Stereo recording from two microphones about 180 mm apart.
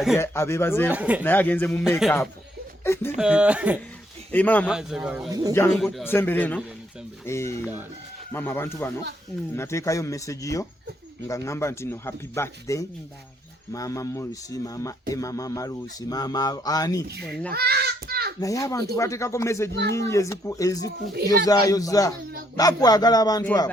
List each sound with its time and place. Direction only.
0.2 s speech: 15° left (ahead or behind)
0.9 s speech: 10° right (ahead or behind)
1.2 s speech: 10° left (ahead or behind)
1.8 s a man's voice: centre (ahead or behind)
2.8 s speech: 15° left (ahead or behind)
3.2 s speech: 5° right (ahead or behind)
4.3 s speech: 10° left (ahead or behind)
4.7 s a man's voice: 5° right (ahead or behind)
5.3 s speech: 20° right (ahead or behind)
5.7 s a man's voice: centre (ahead or behind)
6.1 s speech: 10° left (ahead or behind)
17.5 s a child's voice: 60° right (ahead or behind)
18.3 s speech: 20° left (ahead or behind)